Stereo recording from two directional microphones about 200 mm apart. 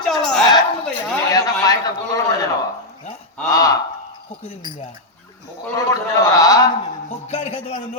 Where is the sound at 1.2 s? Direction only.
15° left (ahead or behind).